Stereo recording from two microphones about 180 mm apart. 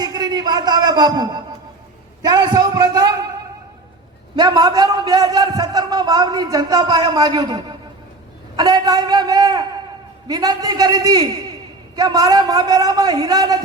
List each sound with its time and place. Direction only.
0.0 s a sound: 20° right (ahead or behind)
2.2 s a man's voice: 20° right (ahead or behind)
4.4 s a man's voice: 20° right (ahead or behind)